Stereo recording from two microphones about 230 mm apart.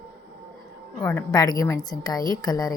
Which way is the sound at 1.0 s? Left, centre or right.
Centre.